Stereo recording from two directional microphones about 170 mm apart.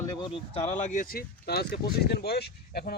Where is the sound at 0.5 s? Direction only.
40° left (ahead or behind).